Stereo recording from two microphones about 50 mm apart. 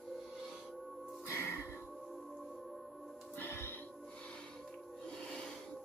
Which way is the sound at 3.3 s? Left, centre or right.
Left.